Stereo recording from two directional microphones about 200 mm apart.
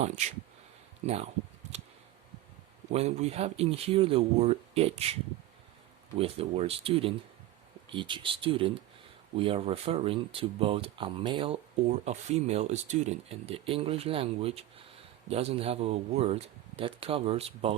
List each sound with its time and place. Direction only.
0.0 s speech: 35° right (ahead or behind)
2.9 s speech: 30° right (ahead or behind)
6.1 s speech: 30° right (ahead or behind)